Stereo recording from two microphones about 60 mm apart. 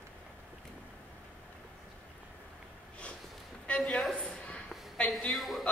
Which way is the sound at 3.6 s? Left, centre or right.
Centre.